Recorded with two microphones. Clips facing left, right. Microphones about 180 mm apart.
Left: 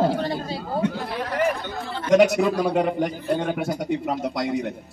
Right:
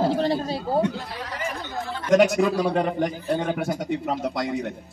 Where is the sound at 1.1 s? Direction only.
60° left (ahead or behind).